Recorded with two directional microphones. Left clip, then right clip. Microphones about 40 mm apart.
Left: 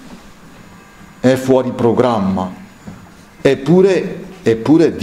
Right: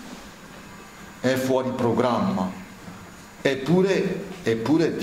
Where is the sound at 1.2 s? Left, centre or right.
Left.